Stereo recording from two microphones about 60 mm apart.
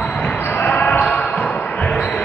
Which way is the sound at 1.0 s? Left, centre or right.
Centre.